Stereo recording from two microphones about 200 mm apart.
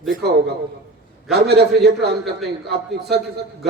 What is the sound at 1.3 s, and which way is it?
A man's voice, 55° right (ahead or behind).